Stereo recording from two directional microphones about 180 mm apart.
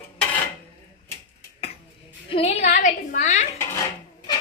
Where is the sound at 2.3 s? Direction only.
35° left (ahead or behind).